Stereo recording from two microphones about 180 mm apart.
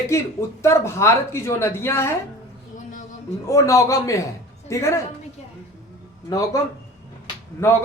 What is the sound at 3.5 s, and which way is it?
Speech, 15° left (ahead or behind).